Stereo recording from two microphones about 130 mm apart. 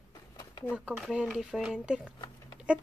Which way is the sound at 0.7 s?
5° right (ahead or behind).